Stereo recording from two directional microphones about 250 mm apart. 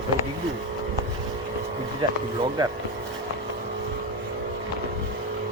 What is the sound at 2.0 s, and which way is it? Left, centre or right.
Speech, centre.